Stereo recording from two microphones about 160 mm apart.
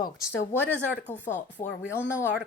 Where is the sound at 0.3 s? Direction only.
10° left (ahead or behind).